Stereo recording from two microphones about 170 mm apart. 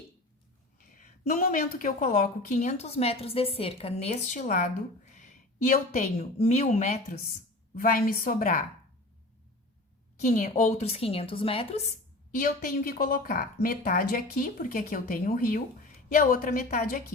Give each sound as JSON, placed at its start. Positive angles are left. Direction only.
{"t": 0.9, "sound": "a woman's voice", "side_deg": 50}
{"t": 7.8, "sound": "speech", "side_deg": 55}
{"t": 10.2, "sound": "a woman's voice", "side_deg": 50}
{"t": 12.3, "sound": "a woman's voice", "side_deg": 50}